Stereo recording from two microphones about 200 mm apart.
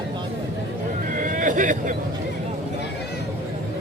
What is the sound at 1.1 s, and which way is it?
Vehicle, 40° right (ahead or behind).